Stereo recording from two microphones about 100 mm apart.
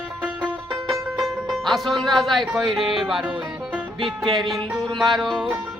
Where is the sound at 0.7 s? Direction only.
5° right (ahead or behind).